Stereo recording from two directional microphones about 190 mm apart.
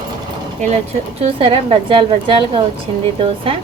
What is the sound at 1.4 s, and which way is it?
A woman's voice, 25° right (ahead or behind).